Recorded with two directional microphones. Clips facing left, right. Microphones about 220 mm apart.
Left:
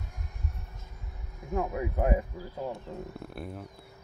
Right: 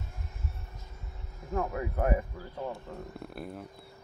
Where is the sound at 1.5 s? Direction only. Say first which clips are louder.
Left 1 dB; 15° left (ahead or behind); by 3.6 s centre (ahead or behind).